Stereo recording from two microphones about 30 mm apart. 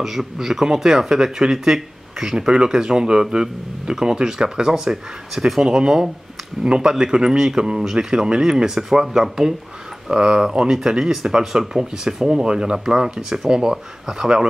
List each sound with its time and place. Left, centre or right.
0.0 s speech: centre
2.3 s speech: right; by 5.6 s centre
5.6 s speech: right